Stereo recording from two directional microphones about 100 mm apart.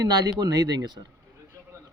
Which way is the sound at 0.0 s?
40° right (ahead or behind).